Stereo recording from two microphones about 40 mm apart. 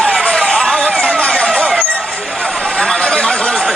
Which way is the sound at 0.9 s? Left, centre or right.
Left.